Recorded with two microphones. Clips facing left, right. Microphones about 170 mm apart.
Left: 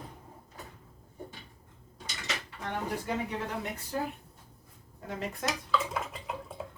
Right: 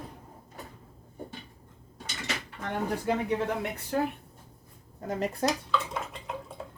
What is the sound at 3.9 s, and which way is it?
Speech, 60° right (ahead or behind).